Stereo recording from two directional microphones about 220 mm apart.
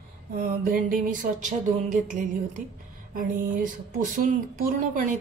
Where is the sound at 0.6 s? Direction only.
40° right (ahead or behind).